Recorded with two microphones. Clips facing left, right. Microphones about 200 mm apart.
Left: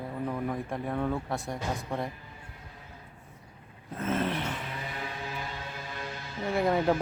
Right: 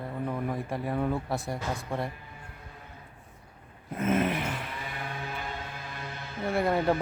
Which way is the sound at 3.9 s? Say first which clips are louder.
Right 3 dB; 15° right (ahead or behind).